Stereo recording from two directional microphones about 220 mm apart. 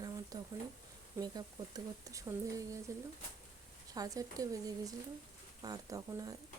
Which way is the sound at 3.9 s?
15° right (ahead or behind).